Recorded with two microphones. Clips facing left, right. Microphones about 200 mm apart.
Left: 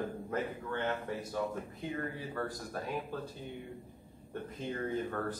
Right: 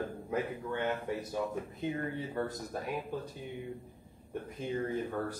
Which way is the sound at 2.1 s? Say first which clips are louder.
Right 3 dB; 20° right (ahead or behind).